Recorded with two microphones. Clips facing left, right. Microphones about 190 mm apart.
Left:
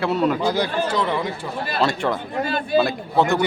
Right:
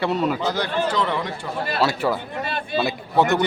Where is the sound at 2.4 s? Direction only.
40° left (ahead or behind).